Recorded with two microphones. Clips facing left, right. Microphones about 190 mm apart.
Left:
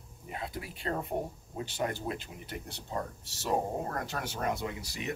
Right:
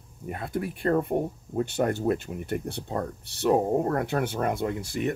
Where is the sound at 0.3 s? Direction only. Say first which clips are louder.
Right 9 dB; 55° right (ahead or behind).